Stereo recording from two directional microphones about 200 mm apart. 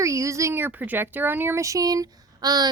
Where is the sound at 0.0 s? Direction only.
15° right (ahead or behind).